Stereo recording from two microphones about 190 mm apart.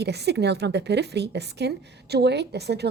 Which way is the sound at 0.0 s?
60° right (ahead or behind).